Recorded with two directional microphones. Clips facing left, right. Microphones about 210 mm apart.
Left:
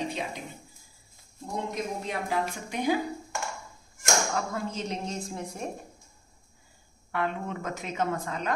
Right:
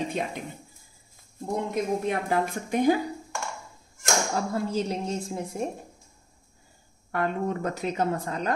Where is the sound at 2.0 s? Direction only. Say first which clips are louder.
Right 4 dB; 50° right (ahead or behind).